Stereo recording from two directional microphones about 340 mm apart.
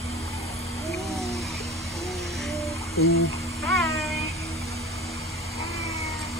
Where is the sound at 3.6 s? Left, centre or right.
Centre.